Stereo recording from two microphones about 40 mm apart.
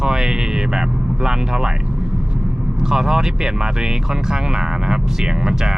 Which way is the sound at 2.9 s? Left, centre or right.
Centre.